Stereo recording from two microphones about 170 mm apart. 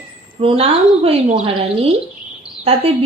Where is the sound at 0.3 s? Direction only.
35° right (ahead or behind).